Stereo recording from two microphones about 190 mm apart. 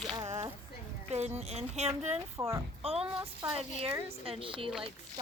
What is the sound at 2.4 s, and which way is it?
Speech, 15° right (ahead or behind).